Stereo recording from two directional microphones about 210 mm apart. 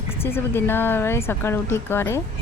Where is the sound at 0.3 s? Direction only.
10° left (ahead or behind).